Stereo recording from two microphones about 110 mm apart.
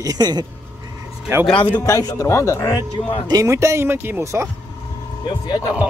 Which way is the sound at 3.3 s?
30° right (ahead or behind).